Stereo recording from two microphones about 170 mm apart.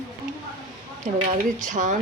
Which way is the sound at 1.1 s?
45° right (ahead or behind).